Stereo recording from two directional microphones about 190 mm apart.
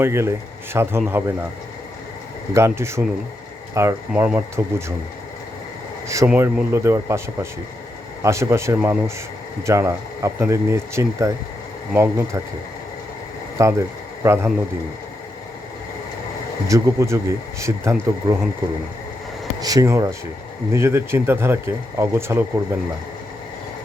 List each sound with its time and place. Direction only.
0.0 s speech: 15° right (ahead or behind)
2.5 s speech: 15° right (ahead or behind)
6.2 s speech: 10° right (ahead or behind)
8.2 s speech: 15° right (ahead or behind)
13.6 s speech: 15° right (ahead or behind)
16.6 s speech: 15° right (ahead or behind)
19.5 s speech: 20° right (ahead or behind)